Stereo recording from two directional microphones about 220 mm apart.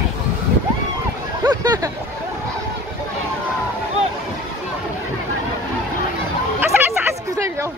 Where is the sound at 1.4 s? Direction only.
20° right (ahead or behind).